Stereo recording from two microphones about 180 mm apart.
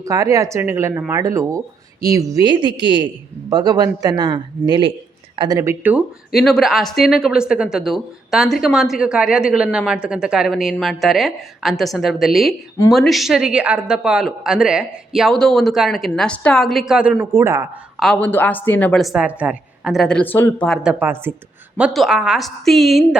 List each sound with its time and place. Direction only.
0.0 s speech: 20° right (ahead or behind)
17.9 s speech: centre (ahead or behind)
20.8 s speech: 10° right (ahead or behind)